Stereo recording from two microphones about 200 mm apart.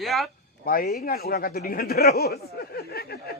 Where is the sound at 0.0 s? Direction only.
Centre (ahead or behind).